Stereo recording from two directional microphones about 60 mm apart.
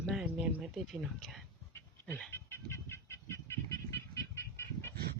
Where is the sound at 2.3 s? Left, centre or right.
Left.